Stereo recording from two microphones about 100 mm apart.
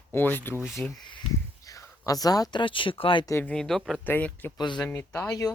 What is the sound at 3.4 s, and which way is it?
Speech, 10° left (ahead or behind).